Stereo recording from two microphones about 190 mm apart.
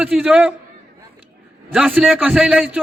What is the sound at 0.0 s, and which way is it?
Speech, 5° right (ahead or behind).